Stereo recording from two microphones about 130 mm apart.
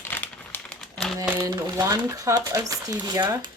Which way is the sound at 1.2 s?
25° right (ahead or behind).